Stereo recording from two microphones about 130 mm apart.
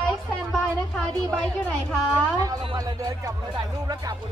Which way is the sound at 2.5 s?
25° right (ahead or behind).